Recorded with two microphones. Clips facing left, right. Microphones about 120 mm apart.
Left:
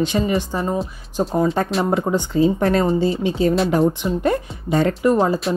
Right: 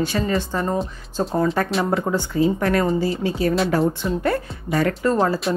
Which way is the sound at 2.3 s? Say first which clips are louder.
Left 3 dB; 25° left (ahead or behind).